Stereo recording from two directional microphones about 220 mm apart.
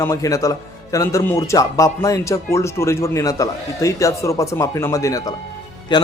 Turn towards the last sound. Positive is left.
turn(degrees=20)  # may be behind; listen again after turning